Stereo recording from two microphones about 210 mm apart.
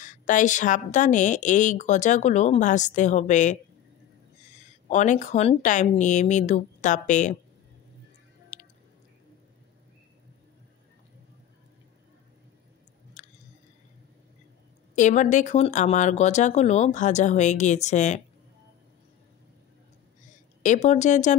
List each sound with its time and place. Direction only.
0.0 s a woman's voice: 35° left (ahead or behind)
4.8 s a woman's voice: 35° left (ahead or behind)
8.5 s music: 35° left (ahead or behind)
13.2 s a sound: 35° left (ahead or behind)
15.0 s a woman's voice: 35° left (ahead or behind)
20.6 s a woman's voice: 35° left (ahead or behind)